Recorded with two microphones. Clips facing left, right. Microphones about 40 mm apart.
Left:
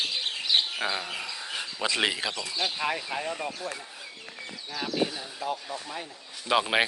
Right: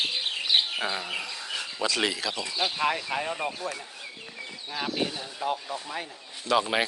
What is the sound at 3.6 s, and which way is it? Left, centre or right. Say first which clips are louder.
Speech: right 2 dB; right.